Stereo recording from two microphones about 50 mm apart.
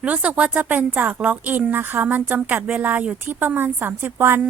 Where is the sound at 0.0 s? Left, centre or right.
Right.